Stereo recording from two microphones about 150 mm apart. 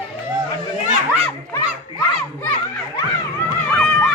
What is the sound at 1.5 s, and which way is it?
Children playing, 20° left (ahead or behind).